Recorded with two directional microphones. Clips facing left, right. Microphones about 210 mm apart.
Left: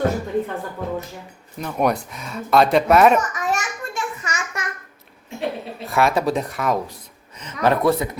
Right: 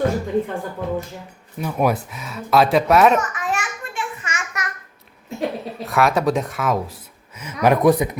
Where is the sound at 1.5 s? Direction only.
5° right (ahead or behind).